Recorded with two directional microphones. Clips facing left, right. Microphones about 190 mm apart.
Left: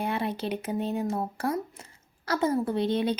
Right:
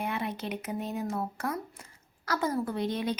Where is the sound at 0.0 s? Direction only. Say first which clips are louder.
Left 4 dB; 30° left (ahead or behind).